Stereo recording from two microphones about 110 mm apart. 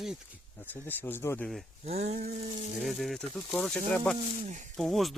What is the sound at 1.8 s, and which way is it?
Speech, 85° right.